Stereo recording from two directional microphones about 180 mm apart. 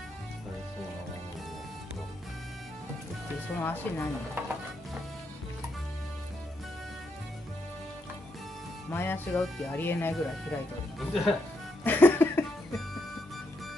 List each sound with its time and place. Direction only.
3.5 s speech: 10° left (ahead or behind)
8.9 s speech: 10° left (ahead or behind)
11.8 s music: 10° left (ahead or behind)